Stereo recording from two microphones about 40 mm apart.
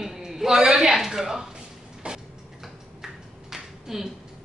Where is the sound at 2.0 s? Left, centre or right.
Right.